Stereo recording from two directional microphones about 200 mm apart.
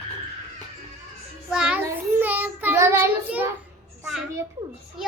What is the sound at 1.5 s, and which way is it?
Child singing, 5° right (ahead or behind).